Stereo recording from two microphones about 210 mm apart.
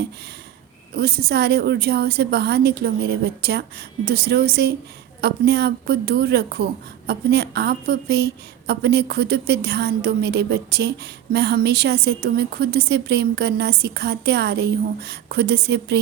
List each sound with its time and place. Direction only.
0.9 s a woman's voice: 50° right (ahead or behind)